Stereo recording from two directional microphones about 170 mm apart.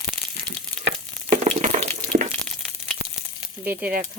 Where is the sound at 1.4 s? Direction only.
40° right (ahead or behind).